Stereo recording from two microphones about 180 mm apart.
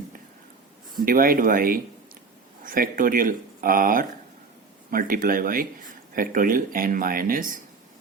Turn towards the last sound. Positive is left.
turn(degrees=-50)  # may be behind; listen again after turning